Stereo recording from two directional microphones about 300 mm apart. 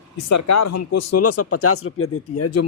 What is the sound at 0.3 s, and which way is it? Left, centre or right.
Speech, left.